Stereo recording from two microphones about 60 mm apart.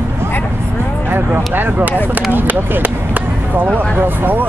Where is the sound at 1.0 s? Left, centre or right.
Right.